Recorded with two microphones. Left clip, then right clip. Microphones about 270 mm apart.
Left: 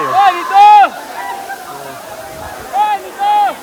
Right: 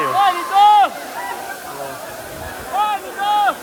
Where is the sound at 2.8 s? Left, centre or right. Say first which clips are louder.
Left 5 dB; left.